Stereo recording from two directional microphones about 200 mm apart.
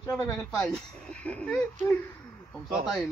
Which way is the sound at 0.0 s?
10° left (ahead or behind).